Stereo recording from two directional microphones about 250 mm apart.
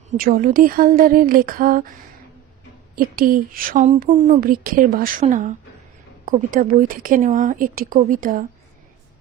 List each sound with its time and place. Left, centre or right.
0.2 s speech: right
2.9 s speech: right